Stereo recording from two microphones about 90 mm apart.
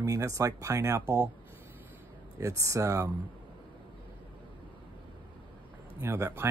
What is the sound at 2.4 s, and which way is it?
Speech, 35° right (ahead or behind).